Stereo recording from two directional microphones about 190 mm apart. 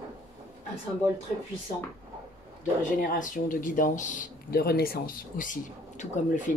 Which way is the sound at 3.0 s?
45° left (ahead or behind).